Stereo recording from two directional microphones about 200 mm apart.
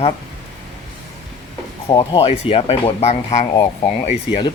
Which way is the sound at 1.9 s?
25° left (ahead or behind).